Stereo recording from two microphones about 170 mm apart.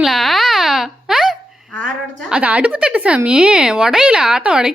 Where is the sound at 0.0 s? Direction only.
Centre (ahead or behind).